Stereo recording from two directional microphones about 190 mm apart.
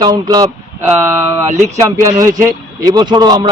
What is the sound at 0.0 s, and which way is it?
Speech, 20° right (ahead or behind).